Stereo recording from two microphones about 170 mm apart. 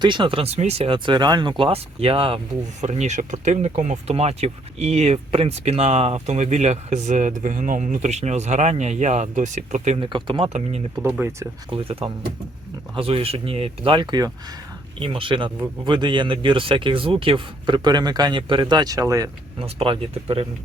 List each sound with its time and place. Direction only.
0.0 s speech: 30° right (ahead or behind)
2.8 s speech: 40° right (ahead or behind)
10.0 s speech: 30° right (ahead or behind)
11.0 s speech: 15° right (ahead or behind)
11.7 s speech: 35° right (ahead or behind)
19.5 s speech: 30° right (ahead or behind)